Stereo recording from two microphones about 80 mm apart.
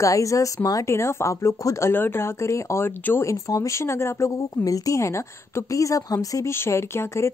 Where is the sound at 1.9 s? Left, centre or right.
Left.